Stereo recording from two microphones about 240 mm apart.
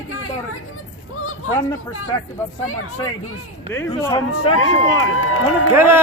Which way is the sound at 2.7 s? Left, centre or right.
Left.